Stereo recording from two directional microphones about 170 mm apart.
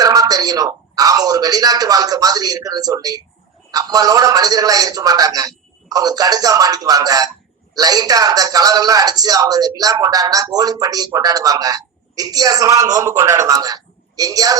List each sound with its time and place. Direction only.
0.0 s speech: 20° right (ahead or behind)